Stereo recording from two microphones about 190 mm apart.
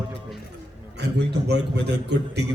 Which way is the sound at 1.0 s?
60° right (ahead or behind).